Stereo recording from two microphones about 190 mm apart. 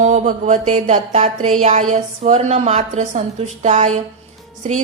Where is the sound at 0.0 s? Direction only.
40° right (ahead or behind).